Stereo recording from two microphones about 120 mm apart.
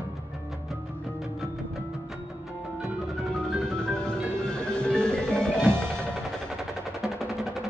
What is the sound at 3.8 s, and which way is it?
Music, 5° left (ahead or behind).